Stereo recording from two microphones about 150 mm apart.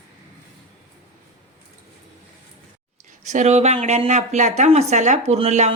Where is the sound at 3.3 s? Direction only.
50° right (ahead or behind).